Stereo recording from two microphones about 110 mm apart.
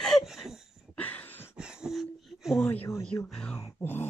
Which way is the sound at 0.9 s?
15° left (ahead or behind).